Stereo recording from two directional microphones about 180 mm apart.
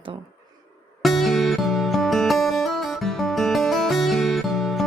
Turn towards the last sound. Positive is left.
turn(degrees=0)  # may be behind; listen again after turning